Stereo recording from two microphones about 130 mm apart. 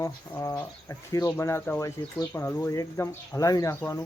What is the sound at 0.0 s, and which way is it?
Speech, 25° left (ahead or behind).